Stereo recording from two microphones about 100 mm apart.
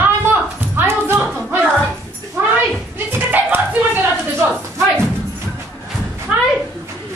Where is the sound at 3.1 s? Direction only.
20° right (ahead or behind).